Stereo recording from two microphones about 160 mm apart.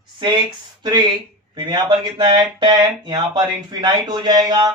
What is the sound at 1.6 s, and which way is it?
Speech, 25° right (ahead or behind).